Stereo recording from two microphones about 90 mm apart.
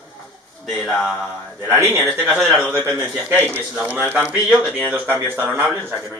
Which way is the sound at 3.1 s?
25° right (ahead or behind).